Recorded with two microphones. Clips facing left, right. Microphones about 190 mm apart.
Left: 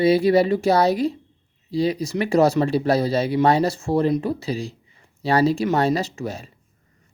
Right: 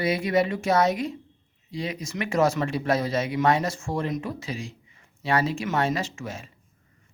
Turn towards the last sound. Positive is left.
turn(degrees=35)  # may be behind; listen again after turning